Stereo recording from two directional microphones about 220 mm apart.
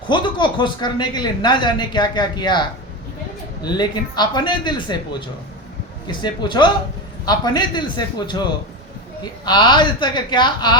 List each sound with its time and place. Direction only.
0.1 s speech: 20° left (ahead or behind)
6.1 s speech: 20° left (ahead or behind)
9.4 s speech: 20° left (ahead or behind)